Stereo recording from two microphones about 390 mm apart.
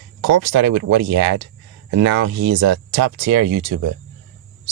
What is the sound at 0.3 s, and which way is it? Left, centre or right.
Speech, right.